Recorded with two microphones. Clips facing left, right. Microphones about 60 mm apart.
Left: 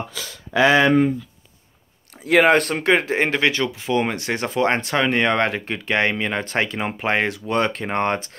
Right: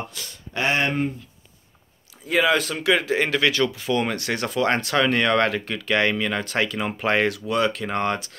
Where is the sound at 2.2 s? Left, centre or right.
Left.